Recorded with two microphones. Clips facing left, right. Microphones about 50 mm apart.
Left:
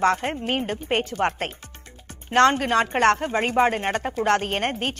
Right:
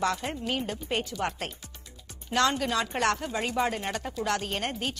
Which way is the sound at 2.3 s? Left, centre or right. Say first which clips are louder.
Left 8 dB; left.